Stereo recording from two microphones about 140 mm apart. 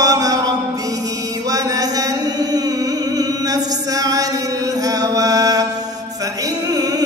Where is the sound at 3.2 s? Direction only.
25° right (ahead or behind).